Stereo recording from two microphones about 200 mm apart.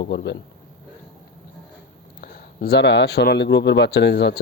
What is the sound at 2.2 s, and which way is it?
Speech, 50° left (ahead or behind).